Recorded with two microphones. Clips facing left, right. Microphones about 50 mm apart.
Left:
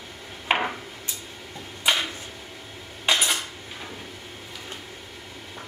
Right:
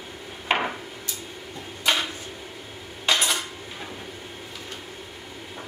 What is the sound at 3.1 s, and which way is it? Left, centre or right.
Cutlery, centre.